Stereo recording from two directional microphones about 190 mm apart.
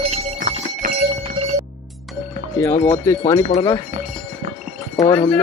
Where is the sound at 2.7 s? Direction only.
40° left (ahead or behind).